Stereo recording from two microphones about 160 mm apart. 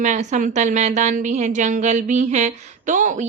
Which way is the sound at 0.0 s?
50° right (ahead or behind).